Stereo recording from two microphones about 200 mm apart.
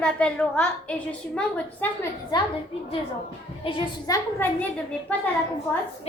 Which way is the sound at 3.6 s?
25° left (ahead or behind).